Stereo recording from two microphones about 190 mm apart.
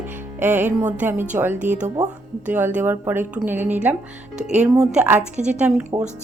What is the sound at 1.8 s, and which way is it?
Speech, 20° right (ahead or behind).